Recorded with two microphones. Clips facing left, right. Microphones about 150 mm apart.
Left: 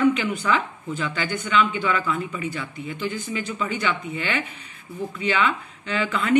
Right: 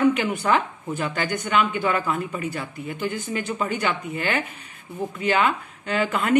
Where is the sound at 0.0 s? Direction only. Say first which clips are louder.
Even; 45° right (ahead or behind).